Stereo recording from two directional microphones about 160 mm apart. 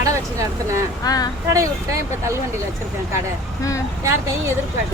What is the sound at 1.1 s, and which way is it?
Speech, 25° left (ahead or behind).